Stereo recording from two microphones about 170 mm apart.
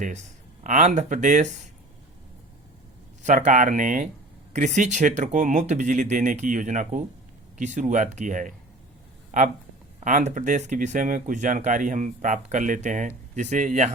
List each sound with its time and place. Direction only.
0.0 s speech: 45° right (ahead or behind)
3.2 s speech: 45° right (ahead or behind)
10.0 s speech: 45° right (ahead or behind)